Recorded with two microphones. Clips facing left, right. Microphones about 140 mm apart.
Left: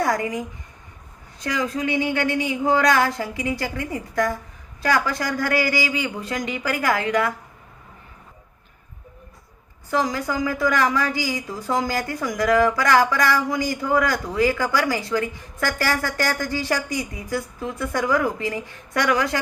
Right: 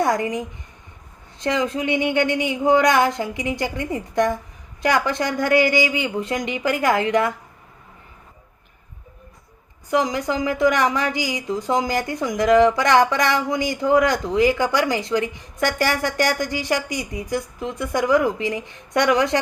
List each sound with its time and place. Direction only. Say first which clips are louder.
0.0 s speech: right 2 dB; 20° right (ahead or behind)
9.9 s speech: right 2 dB; 20° right (ahead or behind)